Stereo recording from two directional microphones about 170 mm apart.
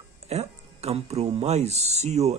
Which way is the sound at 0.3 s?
40° right (ahead or behind).